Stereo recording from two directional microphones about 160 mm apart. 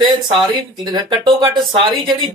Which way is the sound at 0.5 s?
25° right (ahead or behind).